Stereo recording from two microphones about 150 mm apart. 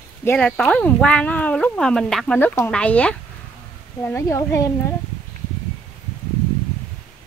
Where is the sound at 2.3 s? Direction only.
15° left (ahead or behind).